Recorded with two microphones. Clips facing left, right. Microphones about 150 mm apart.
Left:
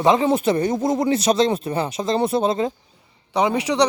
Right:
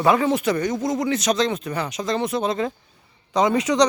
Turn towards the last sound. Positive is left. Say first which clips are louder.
# right 1 dB
turn(degrees=10)  # may be behind; listen again after turning